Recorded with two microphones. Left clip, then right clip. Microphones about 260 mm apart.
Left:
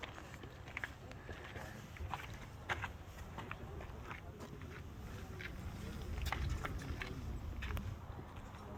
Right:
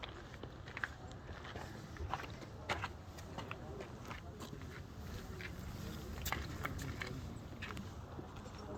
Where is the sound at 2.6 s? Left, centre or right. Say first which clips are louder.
Right 1 dB; right.